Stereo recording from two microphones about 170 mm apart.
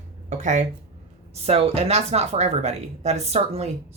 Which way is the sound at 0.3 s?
45° right (ahead or behind).